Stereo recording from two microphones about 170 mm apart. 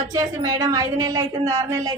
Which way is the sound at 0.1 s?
20° right (ahead or behind).